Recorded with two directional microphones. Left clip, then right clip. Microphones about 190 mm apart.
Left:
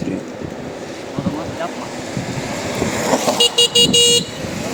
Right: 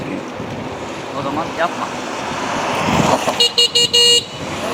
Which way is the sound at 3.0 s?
50° left (ahead or behind).